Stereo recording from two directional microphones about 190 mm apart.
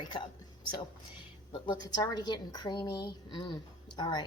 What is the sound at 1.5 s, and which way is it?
A woman's voice, 25° left (ahead or behind).